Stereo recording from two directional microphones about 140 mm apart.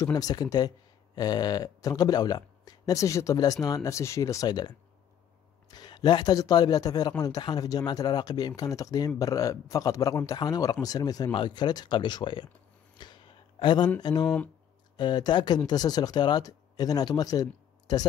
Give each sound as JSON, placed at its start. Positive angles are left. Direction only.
{"t": 0.0, "sound": "speech", "side_deg": 25}
{"t": 13.0, "sound": "a sound", "side_deg": 35}
{"t": 13.9, "sound": "speech", "side_deg": 30}
{"t": 14.2, "sound": "speech", "side_deg": 10}
{"t": 15.0, "sound": "speech", "side_deg": 30}